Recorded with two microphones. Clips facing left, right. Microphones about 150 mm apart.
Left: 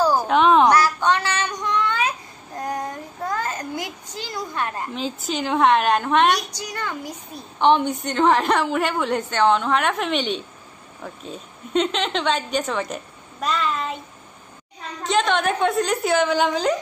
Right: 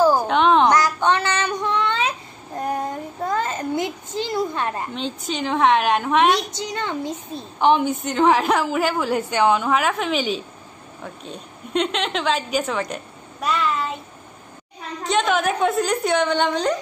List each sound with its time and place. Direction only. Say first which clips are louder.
0.3 s a sound: left 1 dB; centre (ahead or behind)
0.7 s child singing: even; 20° right (ahead or behind)
3.3 s a sound: right 3 dB; 25° right (ahead or behind)
4.9 s a woman's voice: even; centre (ahead or behind)
6.3 s a child's voice: right 3 dB; 25° right (ahead or behind)
7.5 s a woman's voice: even; 5° right (ahead or behind)
15.0 s a woman's voice: even; centre (ahead or behind)